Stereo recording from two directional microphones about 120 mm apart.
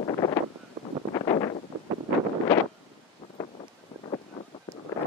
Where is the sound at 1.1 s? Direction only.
35° left (ahead or behind).